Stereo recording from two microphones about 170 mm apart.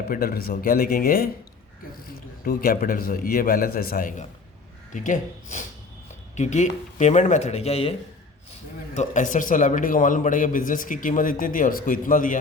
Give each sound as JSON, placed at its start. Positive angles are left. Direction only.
{"t": 0.1, "sound": "a man's voice", "side_deg": 60}
{"t": 2.4, "sound": "a man's voice", "side_deg": 55}
{"t": 9.0, "sound": "a man's voice", "side_deg": 50}